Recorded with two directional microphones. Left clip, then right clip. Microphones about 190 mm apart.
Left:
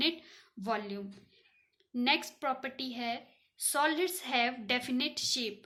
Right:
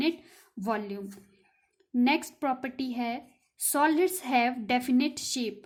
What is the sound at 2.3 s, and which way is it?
A woman's voice, 40° right (ahead or behind).